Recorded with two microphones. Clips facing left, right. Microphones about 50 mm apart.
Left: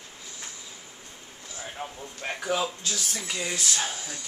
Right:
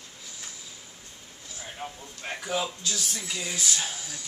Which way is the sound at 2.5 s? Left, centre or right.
Centre.